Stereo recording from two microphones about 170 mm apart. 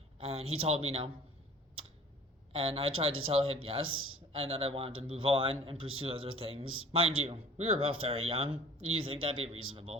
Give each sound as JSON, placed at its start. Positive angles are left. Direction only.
{"t": 0.2, "sound": "speech", "side_deg": -35}
{"t": 2.5, "sound": "speech", "side_deg": -35}